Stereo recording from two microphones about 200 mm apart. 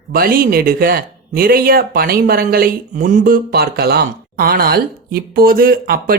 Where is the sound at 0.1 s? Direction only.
45° right (ahead or behind).